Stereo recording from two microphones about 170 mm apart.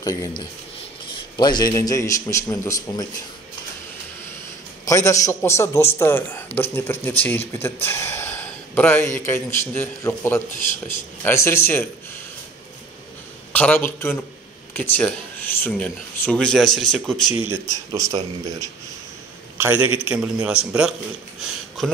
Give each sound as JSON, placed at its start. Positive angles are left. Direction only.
{"t": 0.0, "sound": "speech", "side_deg": 20}
{"t": 1.3, "sound": "a man's voice", "side_deg": 25}
{"t": 4.8, "sound": "speech", "side_deg": 20}
{"t": 13.5, "sound": "a man's voice", "side_deg": 10}
{"t": 17.5, "sound": "speech", "side_deg": -20}
{"t": 19.5, "sound": "a man's voice", "side_deg": -10}